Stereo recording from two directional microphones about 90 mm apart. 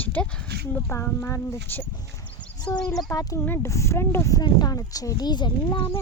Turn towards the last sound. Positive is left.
turn(degrees=65)  # may be behind; listen again after turning